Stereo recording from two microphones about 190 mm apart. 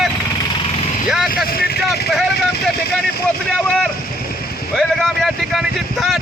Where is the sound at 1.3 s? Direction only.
50° left (ahead or behind).